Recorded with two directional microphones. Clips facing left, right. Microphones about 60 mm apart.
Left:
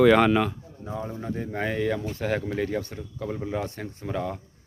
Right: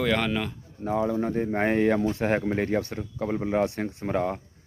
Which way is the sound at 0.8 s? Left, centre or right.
Right.